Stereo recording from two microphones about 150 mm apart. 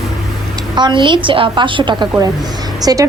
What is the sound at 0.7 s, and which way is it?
A woman's voice, 30° right (ahead or behind).